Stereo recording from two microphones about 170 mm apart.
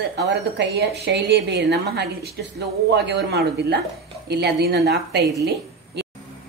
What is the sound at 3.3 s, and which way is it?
A woman's voice, 70° right (ahead or behind).